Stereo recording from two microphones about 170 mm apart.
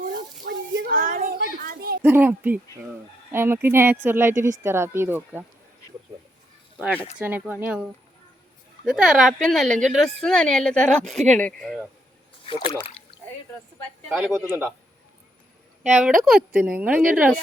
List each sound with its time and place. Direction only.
0.1 s a sound: 75° right (ahead or behind)
0.9 s a sound: 55° right (ahead or behind)
1.6 s a sound: 65° right (ahead or behind)
2.0 s speech: 10° right (ahead or behind)
7.2 s speech: 10° right (ahead or behind); by 11.8 s 5° left (ahead or behind)
12.5 s speech: 30° left (ahead or behind)
14.1 s speech: centre (ahead or behind)
14.4 s speech: 10° right (ahead or behind)
15.9 s speech: 5° right (ahead or behind)